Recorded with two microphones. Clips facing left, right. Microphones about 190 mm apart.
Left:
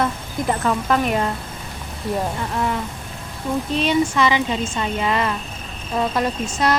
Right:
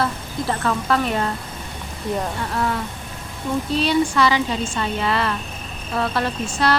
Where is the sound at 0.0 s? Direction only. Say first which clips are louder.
Left 2 dB; 15° left (ahead or behind).